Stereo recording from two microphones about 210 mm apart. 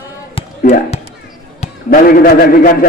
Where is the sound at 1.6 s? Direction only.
40° left (ahead or behind).